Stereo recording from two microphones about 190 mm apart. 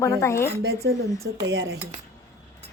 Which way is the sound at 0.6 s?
60° right (ahead or behind).